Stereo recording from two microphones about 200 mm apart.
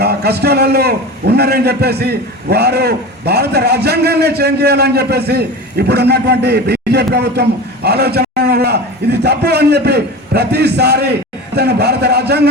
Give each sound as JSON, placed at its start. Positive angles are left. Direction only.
{"t": 0.0, "sound": "a man's voice", "side_deg": -55}